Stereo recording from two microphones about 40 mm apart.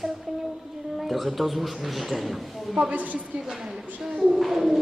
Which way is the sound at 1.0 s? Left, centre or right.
Centre.